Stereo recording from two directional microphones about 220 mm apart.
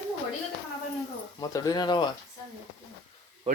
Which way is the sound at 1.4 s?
15° left (ahead or behind).